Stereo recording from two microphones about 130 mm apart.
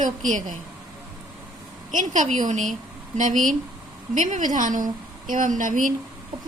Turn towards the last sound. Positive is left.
turn(degrees=-85)